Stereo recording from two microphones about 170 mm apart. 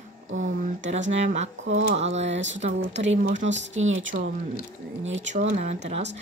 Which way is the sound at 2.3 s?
90° right.